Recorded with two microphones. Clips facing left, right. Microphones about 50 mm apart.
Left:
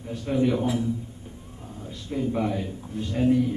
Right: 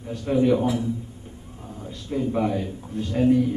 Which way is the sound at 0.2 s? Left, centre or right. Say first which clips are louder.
Right 4 dB; centre.